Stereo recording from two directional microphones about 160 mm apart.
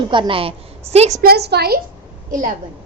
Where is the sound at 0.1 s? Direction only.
30° right (ahead or behind).